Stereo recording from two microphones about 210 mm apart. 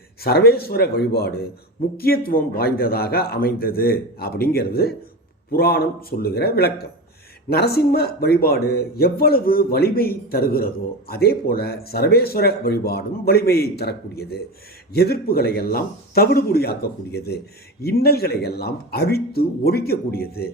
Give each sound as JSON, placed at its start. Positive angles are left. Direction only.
{"t": 0.2, "sound": "speech", "side_deg": 50}